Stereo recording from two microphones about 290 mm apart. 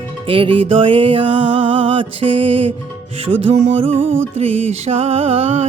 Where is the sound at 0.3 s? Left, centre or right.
Centre.